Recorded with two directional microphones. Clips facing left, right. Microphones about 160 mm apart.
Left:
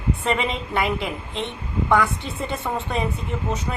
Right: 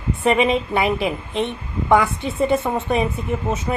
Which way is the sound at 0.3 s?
20° right (ahead or behind).